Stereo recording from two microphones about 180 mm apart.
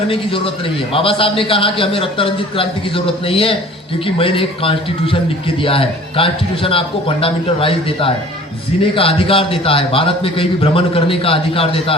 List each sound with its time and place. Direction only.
0.1 s a man's voice: 30° left (ahead or behind)